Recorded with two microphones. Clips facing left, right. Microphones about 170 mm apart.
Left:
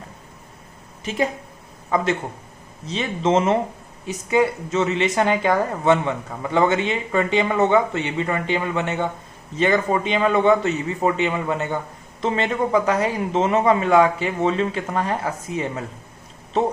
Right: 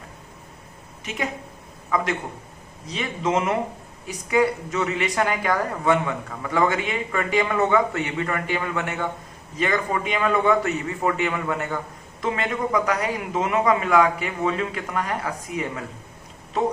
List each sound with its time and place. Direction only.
1.0 s a woman's voice: 30° left (ahead or behind)